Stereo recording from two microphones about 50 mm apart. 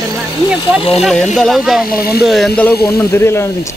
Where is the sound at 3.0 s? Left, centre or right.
Left.